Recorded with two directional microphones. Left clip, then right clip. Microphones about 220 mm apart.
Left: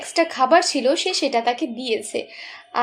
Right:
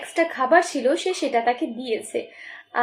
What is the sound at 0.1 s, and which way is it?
A woman's voice, 40° left (ahead or behind).